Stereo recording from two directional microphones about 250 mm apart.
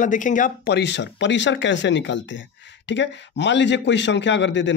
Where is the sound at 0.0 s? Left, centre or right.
Left.